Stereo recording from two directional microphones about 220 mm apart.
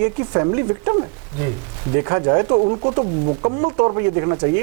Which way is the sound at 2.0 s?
20° right (ahead or behind).